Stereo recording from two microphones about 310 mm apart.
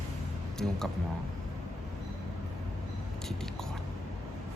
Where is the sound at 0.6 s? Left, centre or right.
Centre.